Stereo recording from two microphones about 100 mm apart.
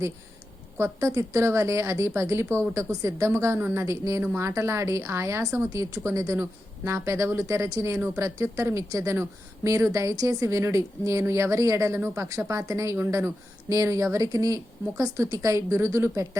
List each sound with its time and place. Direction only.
0.8 s a woman's voice: 30° right (ahead or behind)